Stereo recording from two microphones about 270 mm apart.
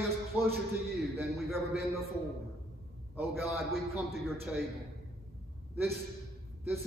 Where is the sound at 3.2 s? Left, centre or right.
Centre.